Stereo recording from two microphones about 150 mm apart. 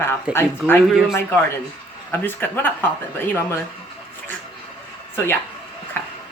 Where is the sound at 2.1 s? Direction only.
15° left (ahead or behind).